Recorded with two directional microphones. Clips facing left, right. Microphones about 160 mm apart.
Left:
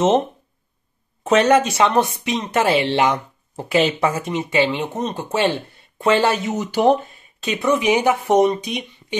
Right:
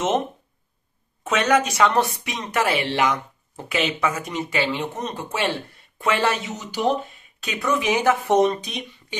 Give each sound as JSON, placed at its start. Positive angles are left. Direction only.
{"t": 1.2, "sound": "speech", "side_deg": 30}
{"t": 6.5, "sound": "speech", "side_deg": 55}
{"t": 7.3, "sound": "speech", "side_deg": 25}